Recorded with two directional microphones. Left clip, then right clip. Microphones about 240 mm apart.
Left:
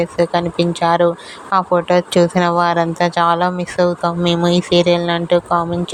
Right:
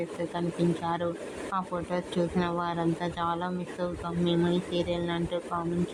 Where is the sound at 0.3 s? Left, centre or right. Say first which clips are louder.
Left 13 dB; left.